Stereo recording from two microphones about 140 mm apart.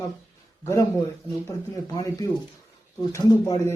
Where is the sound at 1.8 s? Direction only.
25° left (ahead or behind).